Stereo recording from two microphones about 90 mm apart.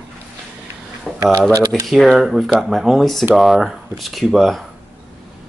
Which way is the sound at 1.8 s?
Centre (ahead or behind).